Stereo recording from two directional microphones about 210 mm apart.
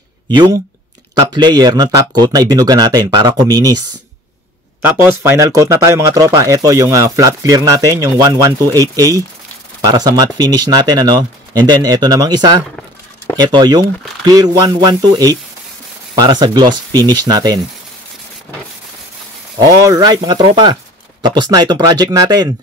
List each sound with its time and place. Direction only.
0.3 s speech: 20° right (ahead or behind)
5.2 s speech: 15° right (ahead or behind)
19.8 s speech: 15° right (ahead or behind)